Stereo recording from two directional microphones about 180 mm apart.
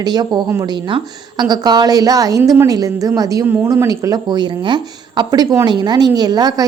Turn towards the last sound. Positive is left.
turn(degrees=-20)  # may be behind; listen again after turning